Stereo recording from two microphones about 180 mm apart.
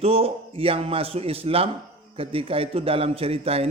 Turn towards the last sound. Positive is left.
turn(degrees=-35)  # may be behind; listen again after turning